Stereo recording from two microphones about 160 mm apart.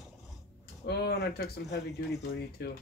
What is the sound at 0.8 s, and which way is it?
Speech, 90° left.